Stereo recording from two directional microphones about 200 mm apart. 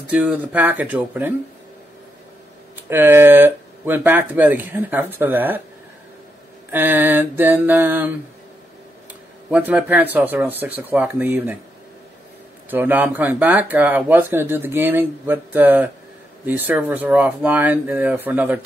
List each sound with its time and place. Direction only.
0.1 s speech: 10° right (ahead or behind)
2.9 s speech: 10° right (ahead or behind)
6.7 s speech: 10° right (ahead or behind)
9.5 s speech: 5° right (ahead or behind)
12.6 s speech: 10° right (ahead or behind)